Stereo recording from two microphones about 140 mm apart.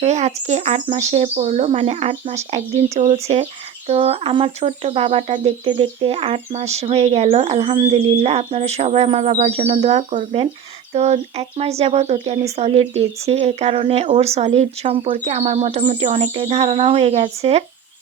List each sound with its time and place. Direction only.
0.0 s speech: 55° right (ahead or behind)
3.9 s speech: 45° right (ahead or behind)